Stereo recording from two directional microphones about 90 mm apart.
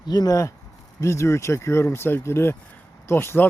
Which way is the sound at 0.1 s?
45° left (ahead or behind).